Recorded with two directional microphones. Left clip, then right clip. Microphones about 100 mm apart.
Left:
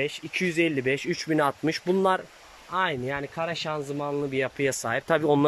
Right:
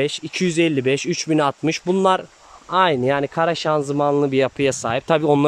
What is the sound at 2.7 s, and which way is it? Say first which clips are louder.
Speech: right 10 dB; 55° right (ahead or behind).